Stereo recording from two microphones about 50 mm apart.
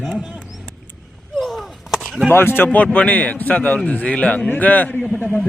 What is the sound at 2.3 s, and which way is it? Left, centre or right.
Speech, left.